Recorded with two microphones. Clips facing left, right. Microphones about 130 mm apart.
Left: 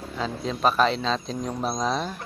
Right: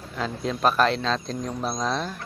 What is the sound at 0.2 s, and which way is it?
A man's voice, centre (ahead or behind).